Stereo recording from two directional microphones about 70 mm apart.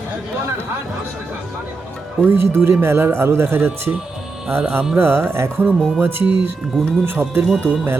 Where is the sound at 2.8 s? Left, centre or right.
Right.